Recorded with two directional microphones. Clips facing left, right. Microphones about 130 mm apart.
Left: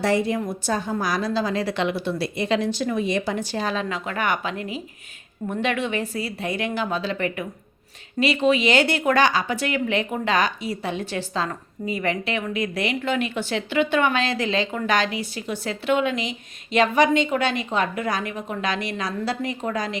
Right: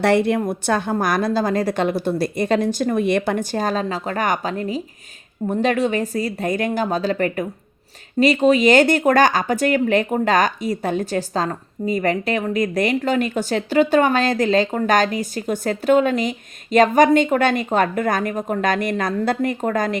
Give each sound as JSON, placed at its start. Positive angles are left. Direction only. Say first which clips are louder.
{"t": 0.0, "sound": "speech", "louder": "right 5 dB", "side_deg": -65}